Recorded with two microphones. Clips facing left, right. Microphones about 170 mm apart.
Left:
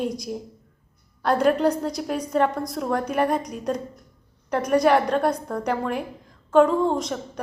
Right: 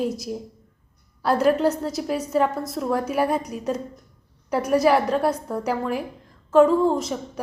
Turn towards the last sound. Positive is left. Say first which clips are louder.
# right 1 dB
turn(degrees=-5)  # may be behind; listen again after turning